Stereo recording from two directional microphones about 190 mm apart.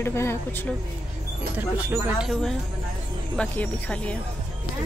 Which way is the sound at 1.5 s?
10° right (ahead or behind).